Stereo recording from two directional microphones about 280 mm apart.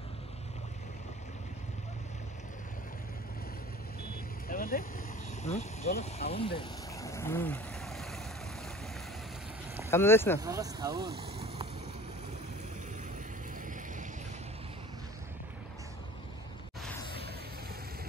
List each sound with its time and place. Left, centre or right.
4.5 s vehicle: left
5.4 s speech: left; by 8.2 s centre
9.8 s speech: centre
10.4 s speech: centre